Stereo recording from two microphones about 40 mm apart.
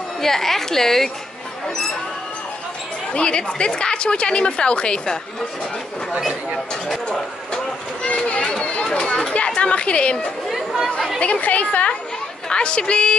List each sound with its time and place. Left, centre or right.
0.2 s a woman's voice: centre
3.1 s a woman's voice: left
8.0 s children playing: left
8.4 s run: left
8.8 s speech: left
9.6 s a woman's voice: left
10.5 s chatter: centre
11.1 s a woman's voice: left
12.4 s a woman's voice: left